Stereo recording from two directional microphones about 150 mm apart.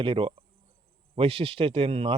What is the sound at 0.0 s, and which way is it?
A man's voice, 35° right (ahead or behind).